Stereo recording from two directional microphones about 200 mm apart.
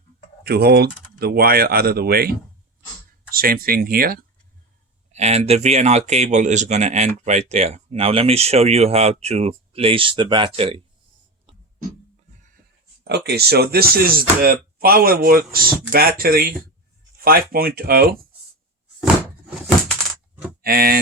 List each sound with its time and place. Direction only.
0.4 s speech: 55° right (ahead or behind)
3.3 s speech: 45° right (ahead or behind)
5.1 s speech: 35° right (ahead or behind)
13.1 s speech: 55° right (ahead or behind)
20.7 s speech: 45° right (ahead or behind)